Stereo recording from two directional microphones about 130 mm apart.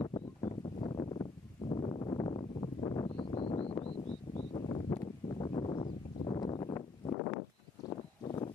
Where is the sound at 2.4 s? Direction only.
40° left (ahead or behind).